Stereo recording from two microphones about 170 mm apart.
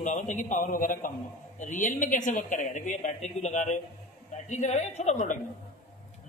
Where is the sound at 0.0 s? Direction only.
45° left (ahead or behind).